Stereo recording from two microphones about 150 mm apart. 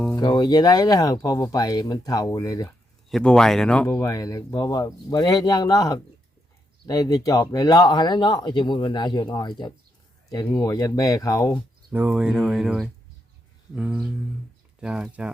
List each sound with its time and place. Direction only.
0.2 s speech: 30° left (ahead or behind)
3.1 s speech: 5° left (ahead or behind)
3.8 s speech: 20° left (ahead or behind)
11.9 s speech: 10° right (ahead or behind)